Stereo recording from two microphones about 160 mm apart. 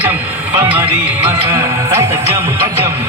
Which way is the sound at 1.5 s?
20° right (ahead or behind).